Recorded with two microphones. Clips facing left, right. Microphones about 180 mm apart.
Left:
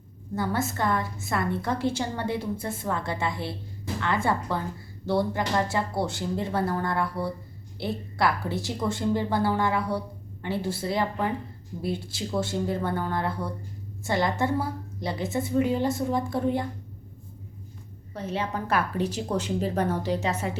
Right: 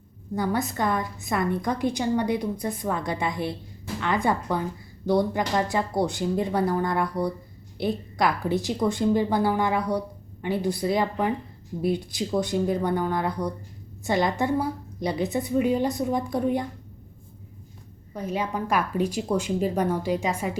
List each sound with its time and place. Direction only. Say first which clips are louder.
0.3 s a woman's voice: right 2 dB; 20° right (ahead or behind)
18.1 s a woman's voice: right 2 dB; 10° right (ahead or behind)